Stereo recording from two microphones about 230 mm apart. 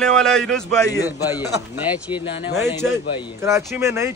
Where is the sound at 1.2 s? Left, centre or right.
Centre.